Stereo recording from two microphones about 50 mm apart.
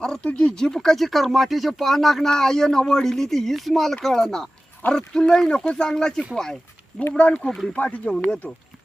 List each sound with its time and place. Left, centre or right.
0.0 s speech: centre
0.5 s speech: centre
7.2 s speech: left